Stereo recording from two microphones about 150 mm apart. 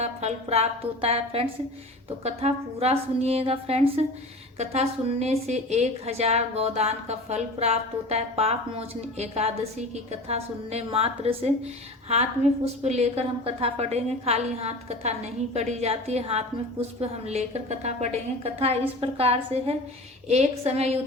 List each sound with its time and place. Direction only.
0.0 s a woman's voice: 45° right (ahead or behind)